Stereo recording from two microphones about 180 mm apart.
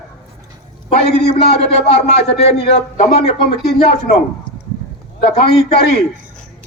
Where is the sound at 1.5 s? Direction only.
35° left (ahead or behind).